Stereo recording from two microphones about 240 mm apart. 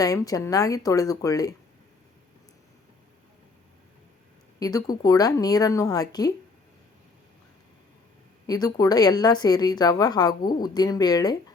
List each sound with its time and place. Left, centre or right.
0.0 s a woman's voice: centre
4.6 s a woman's voice: centre
8.4 s a woman's voice: centre